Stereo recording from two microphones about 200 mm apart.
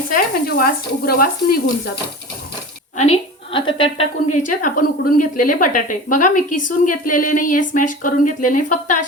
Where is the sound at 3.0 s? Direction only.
30° left (ahead or behind).